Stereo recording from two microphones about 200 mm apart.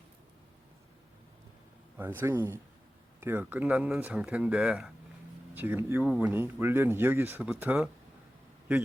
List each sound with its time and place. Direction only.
2.0 s speech: 10° right (ahead or behind)